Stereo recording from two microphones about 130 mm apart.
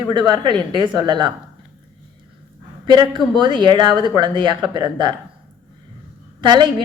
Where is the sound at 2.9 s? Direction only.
35° right (ahead or behind).